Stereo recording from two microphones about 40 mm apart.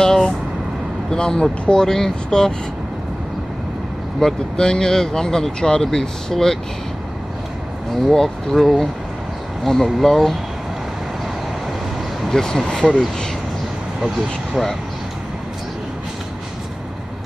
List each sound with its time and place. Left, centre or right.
0.0 s speech: centre
4.2 s speech: centre
7.9 s speech: centre
12.3 s speech: centre